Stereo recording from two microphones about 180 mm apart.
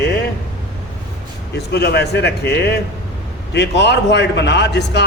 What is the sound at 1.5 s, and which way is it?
A man's voice, 65° left (ahead or behind).